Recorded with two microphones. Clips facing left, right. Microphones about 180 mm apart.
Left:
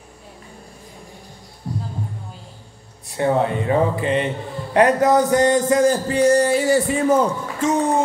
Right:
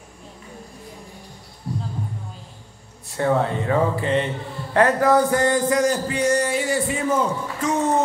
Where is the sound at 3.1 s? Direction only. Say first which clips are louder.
Left 2 dB; 20° left (ahead or behind); by 7.2 s 35° left (ahead or behind).